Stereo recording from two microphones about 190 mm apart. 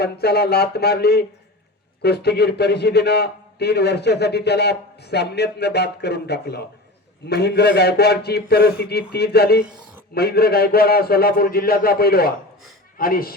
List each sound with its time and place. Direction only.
0.0 s a man's voice: 55° left (ahead or behind)